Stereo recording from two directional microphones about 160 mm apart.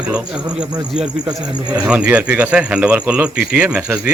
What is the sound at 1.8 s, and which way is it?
Speech, 5° right (ahead or behind).